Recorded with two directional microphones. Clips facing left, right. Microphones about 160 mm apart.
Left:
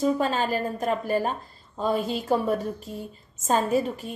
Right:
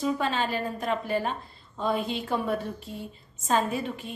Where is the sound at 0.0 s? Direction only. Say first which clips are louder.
Left 4 dB; 40° left (ahead or behind).